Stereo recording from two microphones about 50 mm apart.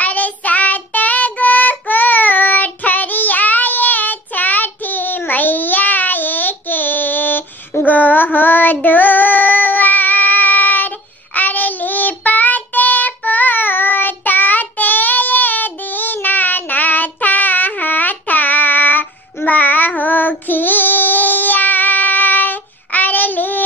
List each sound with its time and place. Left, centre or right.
0.0 s child singing: left